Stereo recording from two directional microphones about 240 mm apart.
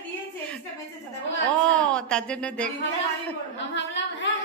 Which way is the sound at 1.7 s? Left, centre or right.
Centre.